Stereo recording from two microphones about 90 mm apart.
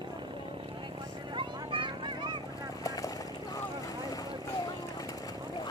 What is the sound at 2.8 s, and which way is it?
Vehicle, 40° left (ahead or behind).